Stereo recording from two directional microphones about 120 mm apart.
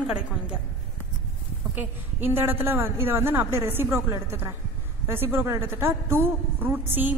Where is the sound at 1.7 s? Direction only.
15° right (ahead or behind).